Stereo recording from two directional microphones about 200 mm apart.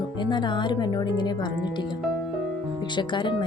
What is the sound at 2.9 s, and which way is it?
Speech, 25° left (ahead or behind).